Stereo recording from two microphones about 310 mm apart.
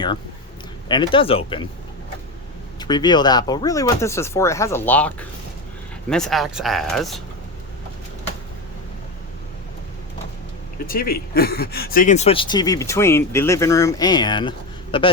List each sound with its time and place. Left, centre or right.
0.9 s speech: centre
2.7 s speech: centre
10.8 s speech: left